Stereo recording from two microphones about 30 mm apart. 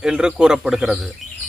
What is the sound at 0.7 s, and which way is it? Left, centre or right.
Speech, centre.